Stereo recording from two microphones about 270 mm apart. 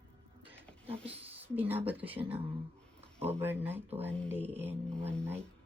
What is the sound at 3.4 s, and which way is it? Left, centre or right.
Speech, centre.